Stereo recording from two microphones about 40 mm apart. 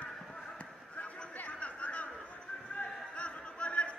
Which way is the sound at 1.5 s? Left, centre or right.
Left.